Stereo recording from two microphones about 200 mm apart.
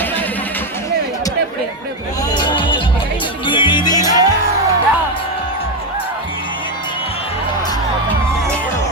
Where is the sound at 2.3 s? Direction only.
20° left (ahead or behind).